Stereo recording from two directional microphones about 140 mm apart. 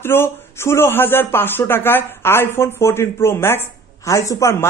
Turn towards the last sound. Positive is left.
turn(degrees=20)  # may be behind; listen again after turning